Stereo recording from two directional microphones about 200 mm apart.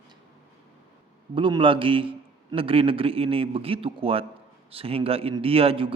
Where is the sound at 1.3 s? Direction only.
25° right (ahead or behind).